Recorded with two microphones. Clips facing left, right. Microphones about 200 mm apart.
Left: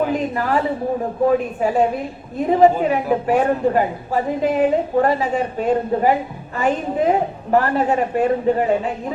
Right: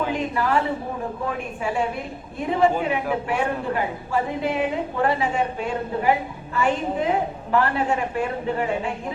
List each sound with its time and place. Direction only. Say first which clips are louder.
0.1 s a woman's voice: left 3 dB; 40° left (ahead or behind)
1.6 s a woman's voice: left 7 dB; 40° left (ahead or behind)